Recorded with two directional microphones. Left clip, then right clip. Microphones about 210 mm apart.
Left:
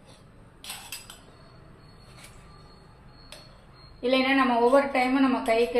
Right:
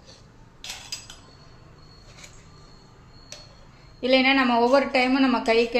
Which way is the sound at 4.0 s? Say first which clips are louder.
Right 3 dB; 55° right (ahead or behind).